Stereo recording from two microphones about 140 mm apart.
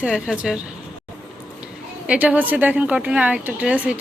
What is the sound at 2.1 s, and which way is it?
A woman's voice, 10° right (ahead or behind).